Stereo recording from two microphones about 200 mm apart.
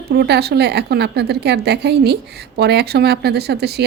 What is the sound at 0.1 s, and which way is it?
Speech, 55° right (ahead or behind).